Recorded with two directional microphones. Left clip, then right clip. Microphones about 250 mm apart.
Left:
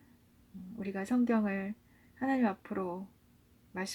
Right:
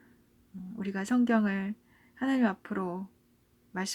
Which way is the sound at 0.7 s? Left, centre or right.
Centre.